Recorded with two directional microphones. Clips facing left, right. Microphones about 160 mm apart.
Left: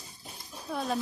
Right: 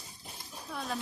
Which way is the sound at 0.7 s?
30° left (ahead or behind).